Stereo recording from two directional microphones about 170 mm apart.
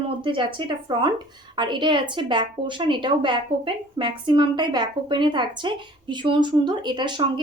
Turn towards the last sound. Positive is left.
turn(degrees=-25)  # may be behind; listen again after turning